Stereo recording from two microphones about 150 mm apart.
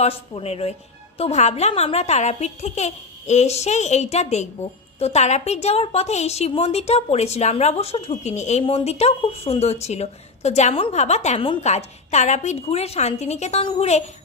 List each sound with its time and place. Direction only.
0.0 s a woman's voice: 40° left (ahead or behind)